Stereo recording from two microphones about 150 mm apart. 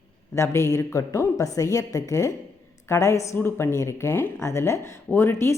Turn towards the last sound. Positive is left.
turn(degrees=15)  # may be behind; listen again after turning